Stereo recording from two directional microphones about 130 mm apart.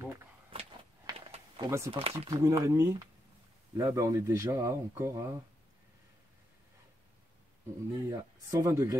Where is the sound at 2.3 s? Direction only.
25° right (ahead or behind).